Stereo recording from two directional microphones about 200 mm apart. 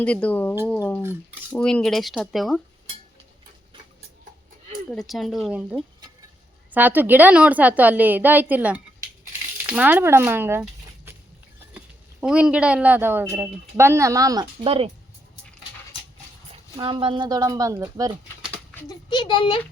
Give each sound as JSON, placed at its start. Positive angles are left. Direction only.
{"t": 0.0, "sound": "speech", "side_deg": 5}
{"t": 4.9, "sound": "a woman's voice", "side_deg": 0}
{"t": 12.2, "sound": "a woman's voice", "side_deg": -5}
{"t": 16.7, "sound": "a woman's voice", "side_deg": -25}
{"t": 18.5, "sound": "a sound", "side_deg": 10}
{"t": 19.1, "sound": "a child's voice", "side_deg": 20}